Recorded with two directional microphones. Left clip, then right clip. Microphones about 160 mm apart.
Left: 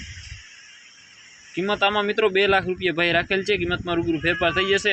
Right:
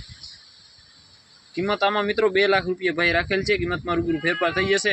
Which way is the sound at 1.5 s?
5° right (ahead or behind).